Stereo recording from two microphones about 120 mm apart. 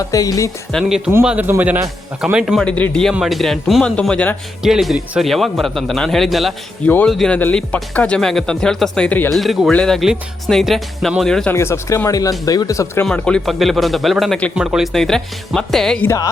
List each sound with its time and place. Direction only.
0.0 s speech: 30° left (ahead or behind)
0.7 s a man's voice: centre (ahead or behind)
2.2 s a man's voice: 5° right (ahead or behind)
2.6 s a man's voice: 10° left (ahead or behind)
4.6 s a man's voice: centre (ahead or behind)
6.8 s a man's voice: 10° left (ahead or behind)
9.3 s a man's voice: centre (ahead or behind)
11.5 s speech: 25° left (ahead or behind)
13.1 s a man's voice: 10° left (ahead or behind); by 14.8 s 5° right (ahead or behind)
14.9 s a man's voice: 5° left (ahead or behind)